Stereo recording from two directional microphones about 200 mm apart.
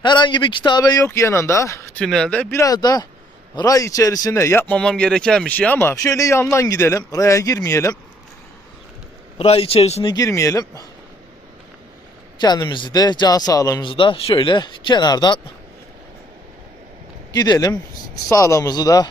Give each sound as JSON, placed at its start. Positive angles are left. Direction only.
{"t": 0.0, "sound": "speech", "side_deg": 25}
{"t": 2.0, "sound": "speech", "side_deg": 5}
{"t": 9.4, "sound": "speech", "side_deg": 30}
{"t": 12.4, "sound": "speech", "side_deg": 20}
{"t": 17.3, "sound": "speech", "side_deg": 20}